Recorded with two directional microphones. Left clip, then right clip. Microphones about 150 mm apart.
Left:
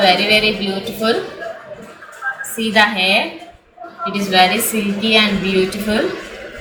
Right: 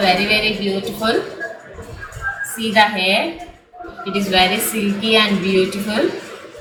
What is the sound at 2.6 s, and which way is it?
A woman's voice, 10° left (ahead or behind).